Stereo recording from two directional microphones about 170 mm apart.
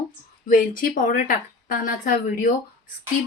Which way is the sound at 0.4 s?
55° left (ahead or behind).